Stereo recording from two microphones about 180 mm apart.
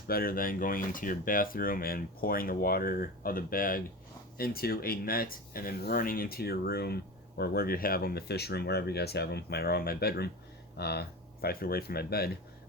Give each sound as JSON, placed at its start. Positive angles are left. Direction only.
{"t": 0.1, "sound": "speech", "side_deg": 55}